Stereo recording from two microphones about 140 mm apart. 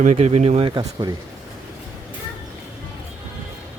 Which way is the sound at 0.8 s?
30° right (ahead or behind).